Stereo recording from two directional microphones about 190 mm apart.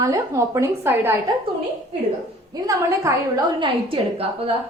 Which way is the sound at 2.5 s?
20° right (ahead or behind).